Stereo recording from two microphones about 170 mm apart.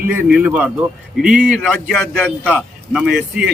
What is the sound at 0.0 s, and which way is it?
Speech, 10° right (ahead or behind).